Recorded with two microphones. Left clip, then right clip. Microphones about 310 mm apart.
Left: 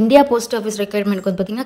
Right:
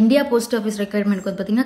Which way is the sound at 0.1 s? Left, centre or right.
Left.